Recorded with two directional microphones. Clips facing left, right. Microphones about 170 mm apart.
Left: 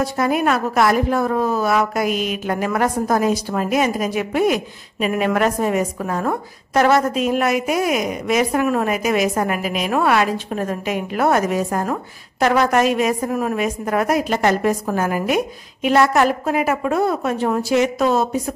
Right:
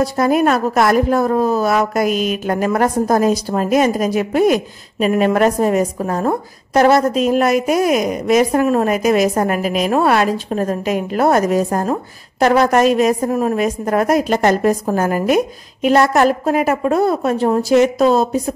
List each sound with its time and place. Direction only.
0.0 s a woman's voice: 40° right (ahead or behind)